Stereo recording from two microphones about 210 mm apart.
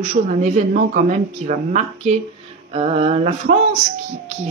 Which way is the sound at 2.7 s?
30° right (ahead or behind).